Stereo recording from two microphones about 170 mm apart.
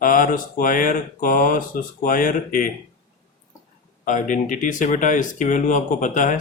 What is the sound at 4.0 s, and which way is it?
Speech, 50° left (ahead or behind).